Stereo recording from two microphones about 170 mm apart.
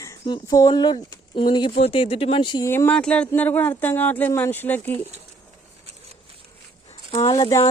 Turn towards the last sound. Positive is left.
turn(degrees=30)  # may be behind; listen again after turning